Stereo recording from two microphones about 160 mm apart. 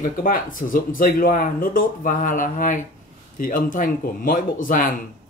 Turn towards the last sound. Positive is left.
turn(degrees=60)  # may be behind; listen again after turning